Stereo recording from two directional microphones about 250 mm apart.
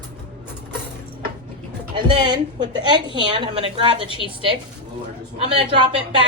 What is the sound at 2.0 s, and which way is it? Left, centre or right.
A woman's voice, centre.